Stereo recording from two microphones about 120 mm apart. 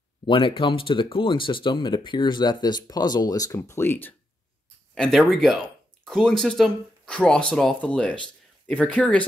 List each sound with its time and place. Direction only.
0.3 s speech: 45° left (ahead or behind); by 4.1 s 20° left (ahead or behind)
4.9 s speech: 5° left (ahead or behind)